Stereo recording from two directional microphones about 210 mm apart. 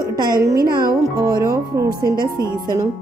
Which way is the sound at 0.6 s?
45° right (ahead or behind).